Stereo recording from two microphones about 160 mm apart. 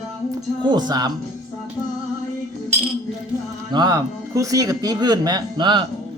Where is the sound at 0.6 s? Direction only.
30° right (ahead or behind).